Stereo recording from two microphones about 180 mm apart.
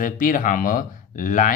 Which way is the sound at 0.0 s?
50° left (ahead or behind).